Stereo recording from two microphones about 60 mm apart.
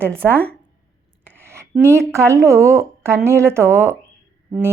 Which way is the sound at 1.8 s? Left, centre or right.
Right.